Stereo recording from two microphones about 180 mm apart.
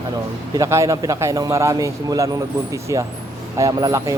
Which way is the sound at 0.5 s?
15° right (ahead or behind).